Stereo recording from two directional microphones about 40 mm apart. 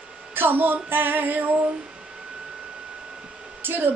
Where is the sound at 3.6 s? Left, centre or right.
Right.